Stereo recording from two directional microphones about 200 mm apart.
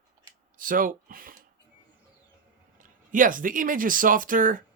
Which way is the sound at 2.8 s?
40° right (ahead or behind).